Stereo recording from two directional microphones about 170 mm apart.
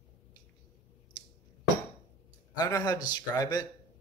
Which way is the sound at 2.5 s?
20° left (ahead or behind).